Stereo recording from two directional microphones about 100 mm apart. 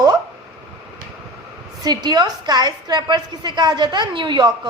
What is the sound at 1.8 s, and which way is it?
A woman's voice, 45° right (ahead or behind).